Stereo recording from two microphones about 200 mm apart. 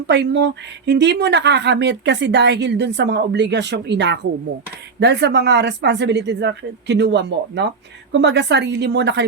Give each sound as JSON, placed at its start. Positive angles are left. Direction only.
{"t": 0.1, "sound": "speech", "side_deg": -60}